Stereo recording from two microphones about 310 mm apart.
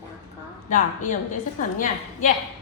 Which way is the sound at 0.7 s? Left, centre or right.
Left.